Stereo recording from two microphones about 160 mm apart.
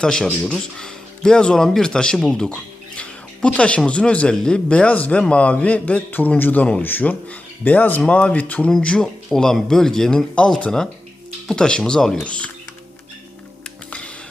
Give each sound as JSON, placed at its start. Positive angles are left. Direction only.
{"t": 0.0, "sound": "speech", "side_deg": 5}
{"t": 13.7, "sound": "music", "side_deg": 5}